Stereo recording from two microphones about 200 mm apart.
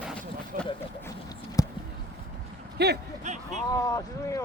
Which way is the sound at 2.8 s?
55° right (ahead or behind).